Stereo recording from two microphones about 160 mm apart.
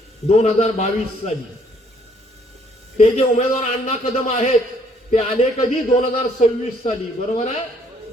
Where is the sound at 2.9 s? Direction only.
50° left (ahead or behind).